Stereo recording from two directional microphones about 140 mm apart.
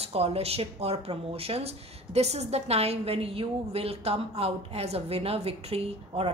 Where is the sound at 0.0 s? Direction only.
45° right (ahead or behind).